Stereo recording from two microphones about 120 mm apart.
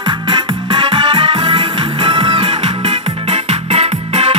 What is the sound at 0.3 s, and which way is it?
Music, 45° right (ahead or behind).